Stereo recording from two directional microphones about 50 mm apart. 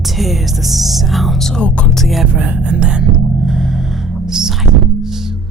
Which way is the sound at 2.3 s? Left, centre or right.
Right.